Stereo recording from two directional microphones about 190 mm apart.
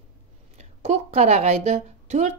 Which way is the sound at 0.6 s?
35° right (ahead or behind).